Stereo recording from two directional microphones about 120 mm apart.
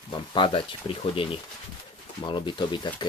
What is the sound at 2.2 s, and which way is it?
Speech, 40° left (ahead or behind).